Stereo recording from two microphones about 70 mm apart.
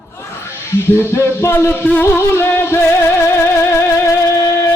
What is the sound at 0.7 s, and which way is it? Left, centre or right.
Music, left.